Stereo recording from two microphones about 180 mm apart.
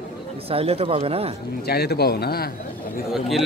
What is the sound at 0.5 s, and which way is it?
Speech, 35° right (ahead or behind).